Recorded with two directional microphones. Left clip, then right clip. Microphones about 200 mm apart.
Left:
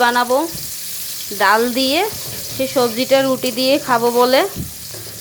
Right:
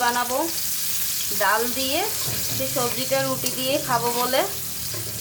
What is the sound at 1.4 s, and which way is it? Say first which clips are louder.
Speech: left 8 dB; 45° left (ahead or behind).